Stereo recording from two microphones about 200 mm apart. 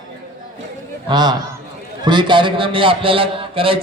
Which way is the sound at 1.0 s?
20° right (ahead or behind).